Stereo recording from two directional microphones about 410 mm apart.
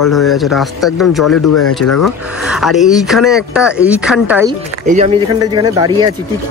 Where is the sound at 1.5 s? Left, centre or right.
Left.